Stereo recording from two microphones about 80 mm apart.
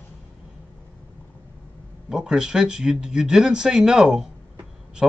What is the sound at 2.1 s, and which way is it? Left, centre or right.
A man's voice, centre.